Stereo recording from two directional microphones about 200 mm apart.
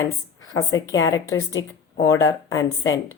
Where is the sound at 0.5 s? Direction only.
15° left (ahead or behind).